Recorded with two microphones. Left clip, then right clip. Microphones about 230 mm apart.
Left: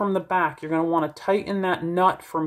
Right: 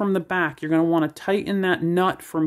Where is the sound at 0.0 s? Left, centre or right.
Right.